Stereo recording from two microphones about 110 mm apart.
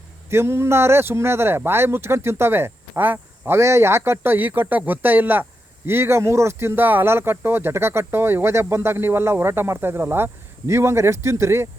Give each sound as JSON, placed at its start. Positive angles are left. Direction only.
{"t": 0.3, "sound": "speech", "side_deg": -25}